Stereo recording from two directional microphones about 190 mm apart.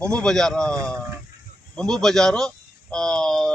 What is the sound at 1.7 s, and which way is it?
Speech, 5° left (ahead or behind).